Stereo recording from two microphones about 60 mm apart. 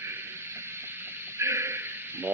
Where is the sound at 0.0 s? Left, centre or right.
Right.